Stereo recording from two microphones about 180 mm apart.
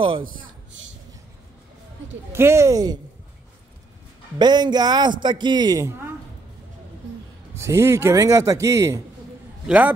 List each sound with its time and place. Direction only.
2.3 s a man's voice: 15° right (ahead or behind)
4.4 s a man's voice: 25° right (ahead or behind)
7.5 s a man's voice: 15° right (ahead or behind)